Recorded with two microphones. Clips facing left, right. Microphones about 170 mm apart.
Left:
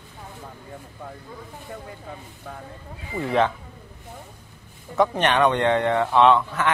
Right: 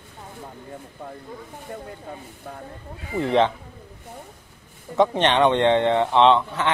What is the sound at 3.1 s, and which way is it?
Speech, 25° right (ahead or behind).